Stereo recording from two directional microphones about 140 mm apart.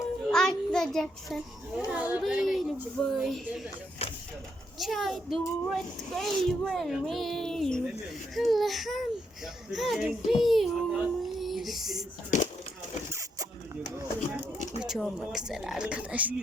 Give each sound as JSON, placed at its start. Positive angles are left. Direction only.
{"t": 0.3, "sound": "child singing", "side_deg": 5}
{"t": 1.9, "sound": "a child's voice", "side_deg": -10}
{"t": 4.8, "sound": "a child's voice", "side_deg": 0}
{"t": 10.4, "sound": "a sound", "side_deg": 0}
{"t": 12.3, "sound": "a sound", "side_deg": 60}
{"t": 14.8, "sound": "a child's voice", "side_deg": 0}